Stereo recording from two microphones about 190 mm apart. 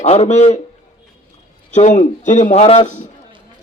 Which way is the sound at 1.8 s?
40° left (ahead or behind).